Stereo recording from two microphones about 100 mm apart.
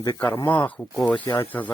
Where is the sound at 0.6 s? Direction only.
15° left (ahead or behind).